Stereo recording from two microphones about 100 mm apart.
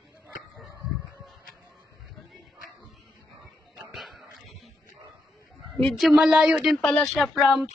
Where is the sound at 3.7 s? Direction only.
Centre (ahead or behind).